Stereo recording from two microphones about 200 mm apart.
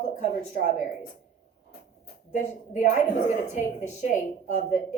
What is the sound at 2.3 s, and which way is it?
Speech, 40° left (ahead or behind).